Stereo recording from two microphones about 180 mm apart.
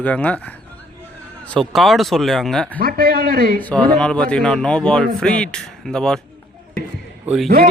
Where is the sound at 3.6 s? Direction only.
10° left (ahead or behind).